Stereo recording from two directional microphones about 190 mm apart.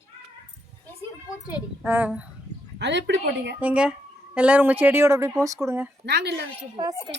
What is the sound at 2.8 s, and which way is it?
Speech, 65° right (ahead or behind).